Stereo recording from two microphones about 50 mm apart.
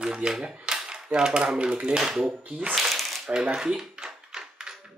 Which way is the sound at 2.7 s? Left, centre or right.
Centre.